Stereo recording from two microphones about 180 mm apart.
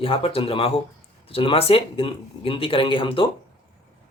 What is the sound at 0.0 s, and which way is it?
Speech, 30° left (ahead or behind).